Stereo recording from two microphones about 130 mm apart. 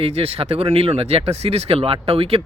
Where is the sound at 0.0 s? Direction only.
50° right (ahead or behind).